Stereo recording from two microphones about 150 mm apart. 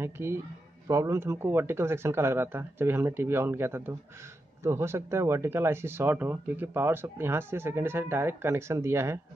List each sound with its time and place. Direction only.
0.0 s speech: 15° right (ahead or behind)